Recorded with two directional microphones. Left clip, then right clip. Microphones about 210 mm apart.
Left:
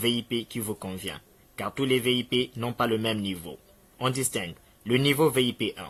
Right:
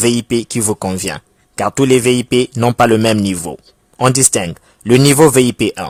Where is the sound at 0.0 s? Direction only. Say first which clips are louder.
Right 13 dB; 50° right (ahead or behind).